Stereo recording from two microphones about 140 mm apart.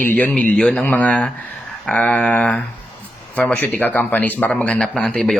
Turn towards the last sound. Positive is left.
turn(degrees=0)  # may be behind; listen again after turning